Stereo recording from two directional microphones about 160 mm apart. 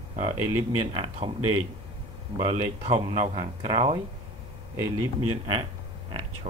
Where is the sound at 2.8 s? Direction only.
40° right (ahead or behind).